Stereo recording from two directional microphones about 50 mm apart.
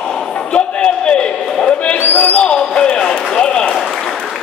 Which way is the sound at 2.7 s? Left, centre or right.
Centre.